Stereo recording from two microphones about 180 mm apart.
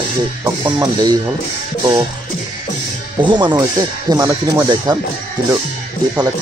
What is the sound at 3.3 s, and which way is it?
Speech, 25° right (ahead or behind).